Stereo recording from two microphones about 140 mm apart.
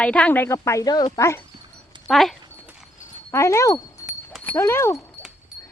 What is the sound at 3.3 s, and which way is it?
Speech, 20° left (ahead or behind).